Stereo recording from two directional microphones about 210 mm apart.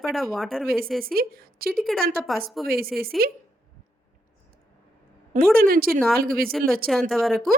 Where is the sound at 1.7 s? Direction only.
Centre (ahead or behind).